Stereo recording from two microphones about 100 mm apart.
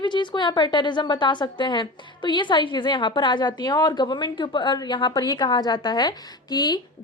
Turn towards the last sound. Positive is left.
turn(degrees=45)  # may be behind; listen again after turning